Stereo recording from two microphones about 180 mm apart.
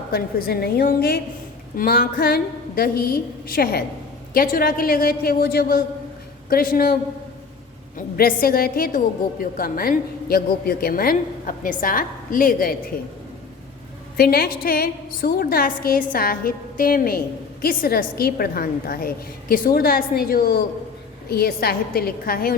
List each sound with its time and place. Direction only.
0.1 s a woman's voice: 55° left (ahead or behind)
7.9 s a woman's voice: 55° left (ahead or behind)
14.2 s a woman's voice: 55° left (ahead or behind)